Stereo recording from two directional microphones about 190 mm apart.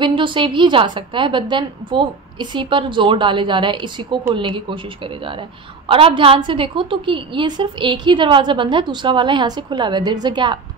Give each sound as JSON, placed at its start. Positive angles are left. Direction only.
{"t": 0.0, "sound": "a woman's voice", "side_deg": -25}
{"t": 5.9, "sound": "a woman's voice", "side_deg": -30}